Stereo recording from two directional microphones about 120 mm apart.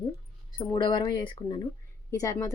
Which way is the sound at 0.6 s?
40° left (ahead or behind).